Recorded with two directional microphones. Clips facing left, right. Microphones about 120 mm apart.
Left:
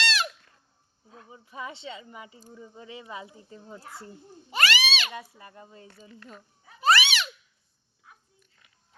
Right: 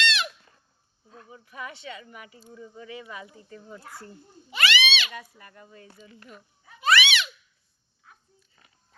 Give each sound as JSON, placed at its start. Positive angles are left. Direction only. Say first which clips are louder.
{"t": 0.0, "sound": "squeak", "louder": "right 1 dB", "side_deg": 40}
{"t": 1.1, "sound": "speech", "louder": "left 1 dB", "side_deg": 20}
{"t": 4.5, "sound": "speech", "louder": "right 1 dB", "side_deg": 40}
{"t": 5.4, "sound": "speech", "louder": "left 1 dB", "side_deg": 25}
{"t": 6.7, "sound": "a sound", "louder": "even", "side_deg": 35}